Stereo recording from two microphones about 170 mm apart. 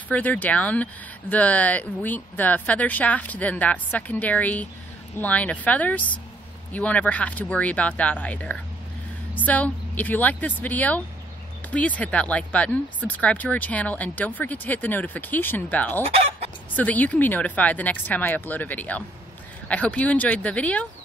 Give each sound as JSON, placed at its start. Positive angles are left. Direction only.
{"t": 0.1, "sound": "speech", "side_deg": 10}
{"t": 16.1, "sound": "chicken", "side_deg": -35}
{"t": 16.7, "sound": "speech", "side_deg": 10}